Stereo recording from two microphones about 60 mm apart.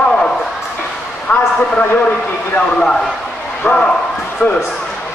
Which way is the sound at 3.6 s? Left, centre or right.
Centre.